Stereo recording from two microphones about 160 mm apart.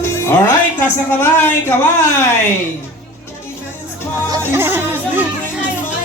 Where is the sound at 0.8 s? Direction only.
15° left (ahead or behind).